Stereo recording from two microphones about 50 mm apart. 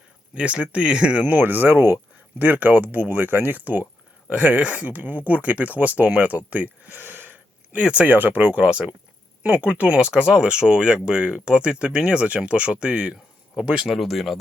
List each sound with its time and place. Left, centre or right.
0.3 s speech: right
1.3 s speech: right
2.4 s speech: right
7.8 s speech: right
8.1 s speech: right
8.6 s speech: right
10.1 s speech: centre
13.7 s speech: centre